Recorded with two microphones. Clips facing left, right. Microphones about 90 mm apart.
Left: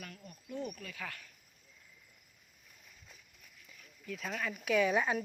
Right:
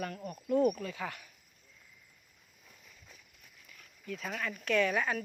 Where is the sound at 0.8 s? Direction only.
30° right (ahead or behind).